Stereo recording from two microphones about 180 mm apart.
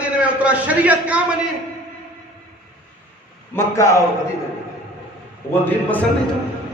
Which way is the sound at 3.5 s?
15° left (ahead or behind).